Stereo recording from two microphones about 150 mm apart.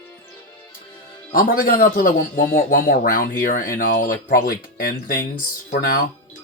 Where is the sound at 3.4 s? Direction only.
65° left (ahead or behind).